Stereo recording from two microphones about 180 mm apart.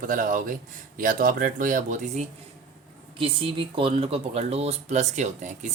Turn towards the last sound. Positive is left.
turn(degrees=-40)  # may be behind; listen again after turning